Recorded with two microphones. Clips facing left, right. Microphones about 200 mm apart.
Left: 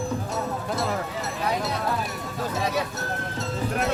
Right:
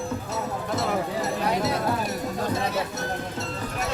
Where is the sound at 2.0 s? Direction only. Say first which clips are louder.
Right 4 dB; 40° right (ahead or behind).